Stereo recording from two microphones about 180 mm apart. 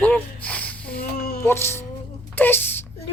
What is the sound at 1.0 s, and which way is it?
Speech, 60° left (ahead or behind).